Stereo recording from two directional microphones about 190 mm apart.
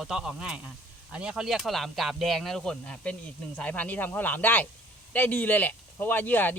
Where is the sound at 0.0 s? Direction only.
5° right (ahead or behind).